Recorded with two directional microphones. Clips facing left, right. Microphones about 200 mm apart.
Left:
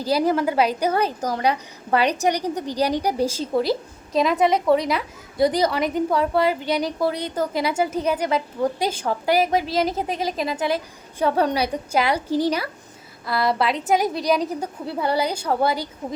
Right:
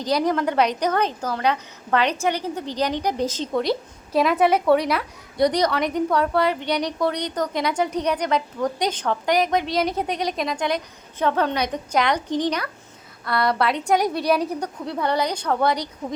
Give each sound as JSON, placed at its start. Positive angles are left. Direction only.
{"t": 0.0, "sound": "a woman's voice", "side_deg": 5}